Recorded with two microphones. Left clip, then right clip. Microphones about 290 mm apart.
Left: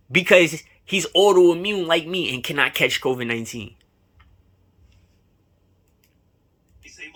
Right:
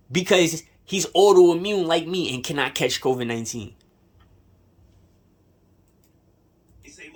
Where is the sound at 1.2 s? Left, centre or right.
Centre.